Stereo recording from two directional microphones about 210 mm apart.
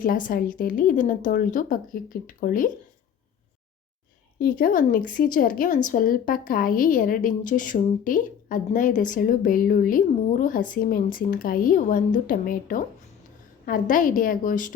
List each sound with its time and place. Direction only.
0.0 s a woman's voice: 40° left (ahead or behind)
4.4 s a woman's voice: 45° left (ahead or behind)